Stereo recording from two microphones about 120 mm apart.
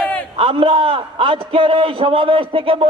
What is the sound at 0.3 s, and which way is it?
A man's voice, 45° right (ahead or behind).